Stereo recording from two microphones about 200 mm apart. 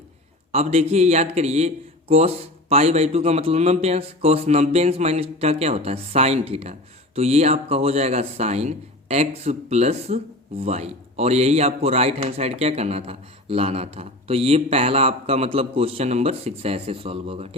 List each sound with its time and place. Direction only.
0.5 s speech: 35° right (ahead or behind)